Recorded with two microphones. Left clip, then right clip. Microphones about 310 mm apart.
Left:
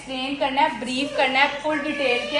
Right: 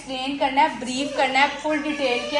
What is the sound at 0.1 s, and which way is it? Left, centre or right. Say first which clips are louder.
A woman's voice: right 1 dB; right.